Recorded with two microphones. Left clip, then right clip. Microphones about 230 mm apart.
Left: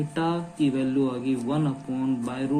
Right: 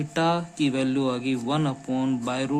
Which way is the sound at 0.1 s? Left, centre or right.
Right.